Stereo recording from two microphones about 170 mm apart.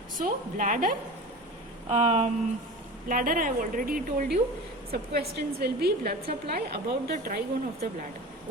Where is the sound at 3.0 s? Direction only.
55° right (ahead or behind).